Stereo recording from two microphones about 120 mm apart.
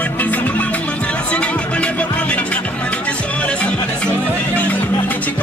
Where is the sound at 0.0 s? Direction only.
15° left (ahead or behind).